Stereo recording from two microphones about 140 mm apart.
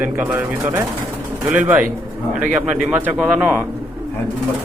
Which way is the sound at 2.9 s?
10° right (ahead or behind).